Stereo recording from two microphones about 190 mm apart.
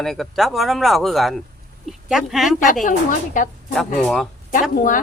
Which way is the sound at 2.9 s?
45° left (ahead or behind).